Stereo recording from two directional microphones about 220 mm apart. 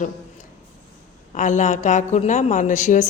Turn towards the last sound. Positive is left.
turn(degrees=35)  # may be behind; listen again after turning